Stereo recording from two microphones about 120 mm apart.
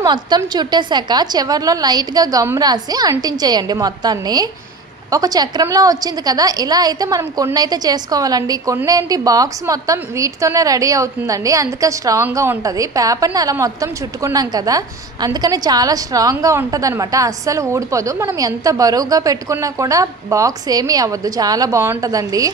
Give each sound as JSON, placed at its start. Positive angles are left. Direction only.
{"t": 0.0, "sound": "a woman's voice", "side_deg": -35}